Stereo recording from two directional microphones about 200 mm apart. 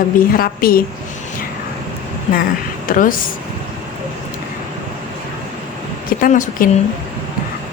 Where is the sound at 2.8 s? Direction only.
45° left (ahead or behind).